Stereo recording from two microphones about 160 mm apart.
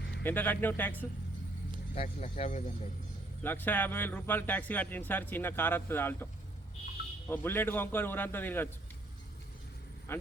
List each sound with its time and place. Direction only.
0.2 s a man's voice: 10° left (ahead or behind)
2.0 s speech: 45° left (ahead or behind)
3.4 s a man's voice: 10° left (ahead or behind)
7.3 s a man's voice: 15° left (ahead or behind)
10.1 s a man's voice: 15° left (ahead or behind)